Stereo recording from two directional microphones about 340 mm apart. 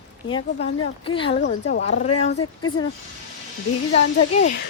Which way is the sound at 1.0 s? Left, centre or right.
Centre.